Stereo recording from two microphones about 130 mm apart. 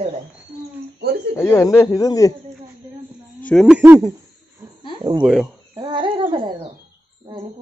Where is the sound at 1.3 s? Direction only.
20° left (ahead or behind).